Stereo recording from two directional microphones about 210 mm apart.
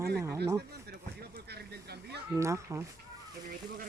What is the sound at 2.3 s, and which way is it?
Speech, 15° right (ahead or behind).